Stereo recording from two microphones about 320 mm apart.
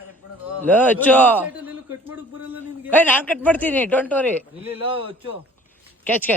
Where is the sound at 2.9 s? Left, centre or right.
Centre.